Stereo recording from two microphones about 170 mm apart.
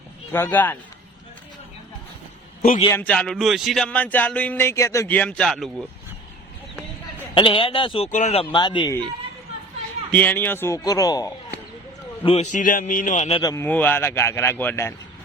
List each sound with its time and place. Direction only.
0.3 s speech: 15° left (ahead or behind)
2.6 s a man's voice: 50° left (ahead or behind)
2.9 s speech: 10° left (ahead or behind)
7.3 s speech: 30° left (ahead or behind)
8.5 s a man's voice: 25° left (ahead or behind)
10.1 s speech: 10° left (ahead or behind)
12.2 s a man's voice: 40° left (ahead or behind)
13.4 s a man's voice: 20° left (ahead or behind)
13.7 s speech: 10° left (ahead or behind)